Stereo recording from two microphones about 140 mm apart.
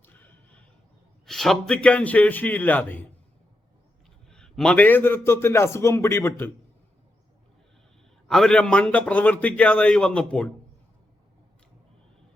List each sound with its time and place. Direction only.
0.0 s a sound: 15° left (ahead or behind)
1.2 s a man's voice: centre (ahead or behind)
4.3 s a man's voice: 5° left (ahead or behind)
8.3 s a man's voice: 5° left (ahead or behind)